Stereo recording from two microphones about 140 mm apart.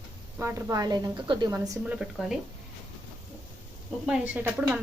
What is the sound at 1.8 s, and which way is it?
Speech, 5° right (ahead or behind).